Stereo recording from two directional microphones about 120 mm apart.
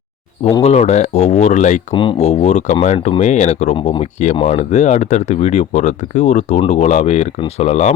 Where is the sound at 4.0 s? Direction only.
85° left.